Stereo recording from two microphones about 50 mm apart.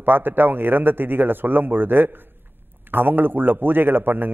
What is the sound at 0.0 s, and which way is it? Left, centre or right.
A man's voice, right.